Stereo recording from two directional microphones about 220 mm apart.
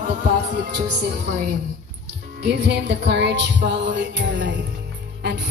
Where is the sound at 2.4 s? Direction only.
50° right (ahead or behind).